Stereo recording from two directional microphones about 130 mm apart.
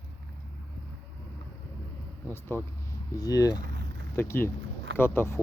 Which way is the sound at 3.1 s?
30° left (ahead or behind).